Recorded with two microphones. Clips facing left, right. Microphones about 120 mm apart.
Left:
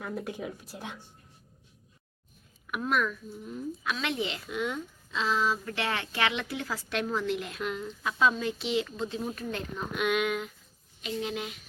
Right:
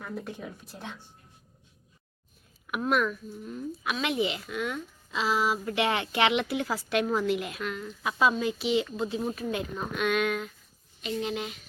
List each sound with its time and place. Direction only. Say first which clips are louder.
0.0 s speech: left 2 dB; 5° left (ahead or behind)
2.6 s a woman's voice: right 2 dB; 5° right (ahead or behind)
4.4 s speech: even; 20° left (ahead or behind)
5.1 s a woman's voice: right 1 dB; 10° right (ahead or behind)
7.6 s speech: left 1 dB; 20° left (ahead or behind)
8.0 s a woman's voice: right 2 dB; 5° right (ahead or behind)
9.9 s speech: right 1 dB; 10° left (ahead or behind)
11.0 s speech: right 2 dB; centre (ahead or behind)